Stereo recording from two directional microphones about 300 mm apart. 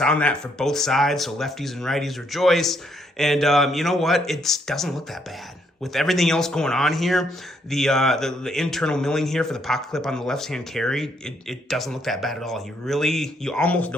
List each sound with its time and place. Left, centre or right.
0.0 s speech: centre